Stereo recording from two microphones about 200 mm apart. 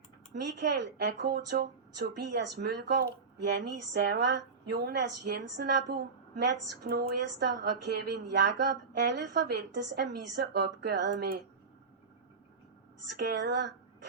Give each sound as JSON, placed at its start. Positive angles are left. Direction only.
{"t": 0.4, "sound": "a woman's voice", "side_deg": -60}
{"t": 13.0, "sound": "a woman's voice", "side_deg": -60}